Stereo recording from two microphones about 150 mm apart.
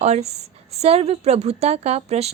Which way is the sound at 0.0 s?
45° right (ahead or behind).